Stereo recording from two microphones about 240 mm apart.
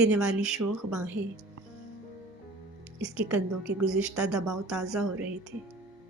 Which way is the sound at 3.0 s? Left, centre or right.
Centre.